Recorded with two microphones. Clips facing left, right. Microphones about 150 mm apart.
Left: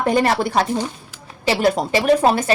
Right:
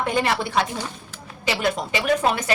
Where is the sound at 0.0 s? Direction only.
40° left (ahead or behind).